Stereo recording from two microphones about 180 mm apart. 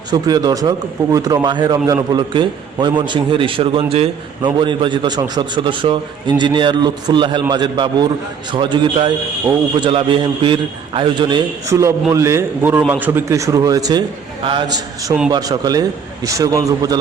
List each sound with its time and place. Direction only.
0.1 s a man's voice: 20° right (ahead or behind)
15.3 s a man's voice: 20° right (ahead or behind)